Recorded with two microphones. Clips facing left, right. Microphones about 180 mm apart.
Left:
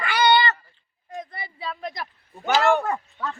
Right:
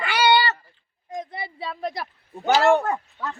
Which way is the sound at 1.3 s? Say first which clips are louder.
Right 4 dB; 30° right (ahead or behind).